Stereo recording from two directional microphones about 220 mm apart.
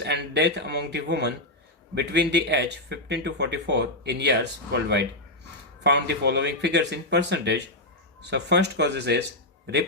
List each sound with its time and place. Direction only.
0.0 s speech: 50° right (ahead or behind)